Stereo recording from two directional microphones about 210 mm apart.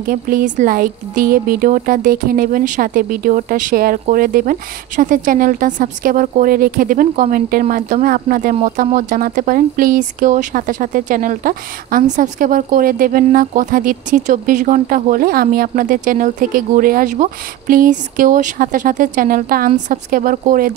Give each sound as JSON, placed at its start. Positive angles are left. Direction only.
{"t": 0.1, "sound": "speech", "side_deg": -40}